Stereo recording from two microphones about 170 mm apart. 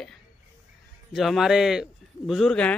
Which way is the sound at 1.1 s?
Centre (ahead or behind).